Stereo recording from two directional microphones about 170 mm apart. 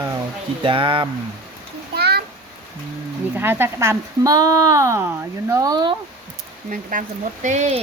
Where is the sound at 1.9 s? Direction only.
70° right (ahead or behind).